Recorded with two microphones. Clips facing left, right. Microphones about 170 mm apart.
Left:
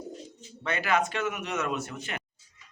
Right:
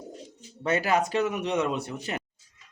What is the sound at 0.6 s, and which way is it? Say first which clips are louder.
Speech: right 3 dB; 40° right (ahead or behind).